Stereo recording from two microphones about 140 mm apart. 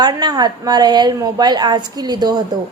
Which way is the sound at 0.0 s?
30° right (ahead or behind).